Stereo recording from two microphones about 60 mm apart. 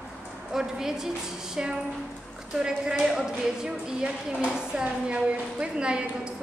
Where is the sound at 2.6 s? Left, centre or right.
Centre.